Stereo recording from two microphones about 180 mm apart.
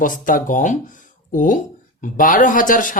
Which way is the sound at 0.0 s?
45° left (ahead or behind).